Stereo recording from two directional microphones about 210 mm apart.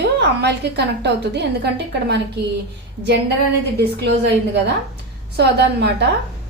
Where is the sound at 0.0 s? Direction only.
55° right (ahead or behind).